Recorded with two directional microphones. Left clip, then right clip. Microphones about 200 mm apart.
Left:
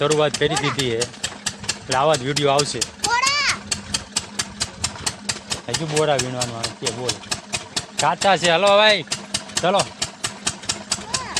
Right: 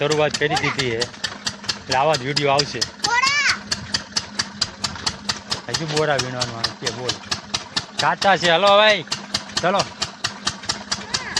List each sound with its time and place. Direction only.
0.0 s speech: 20° left (ahead or behind)
0.7 s engine: 25° left (ahead or behind)
2.6 s a child's voice: 35° left (ahead or behind)
3.1 s children playing: 25° left (ahead or behind)
3.7 s engine: 40° left (ahead or behind)
6.1 s speech: 20° left (ahead or behind)
7.1 s engine: 25° left (ahead or behind)
8.0 s speech: 10° left (ahead or behind)
9.0 s vehicle: 30° left (ahead or behind)
9.6 s engine: 20° left (ahead or behind)